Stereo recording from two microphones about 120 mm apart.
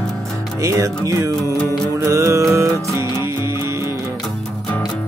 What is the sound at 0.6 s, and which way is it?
Music, 25° right (ahead or behind).